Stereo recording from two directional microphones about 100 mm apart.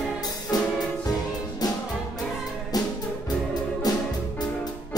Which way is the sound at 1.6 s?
40° left (ahead or behind).